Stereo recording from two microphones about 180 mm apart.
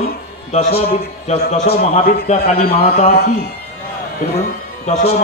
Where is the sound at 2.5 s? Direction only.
35° left (ahead or behind).